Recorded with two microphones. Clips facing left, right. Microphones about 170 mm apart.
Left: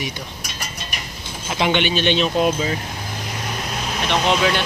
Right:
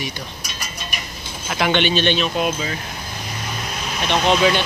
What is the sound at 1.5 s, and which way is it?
Speech, 20° left (ahead or behind).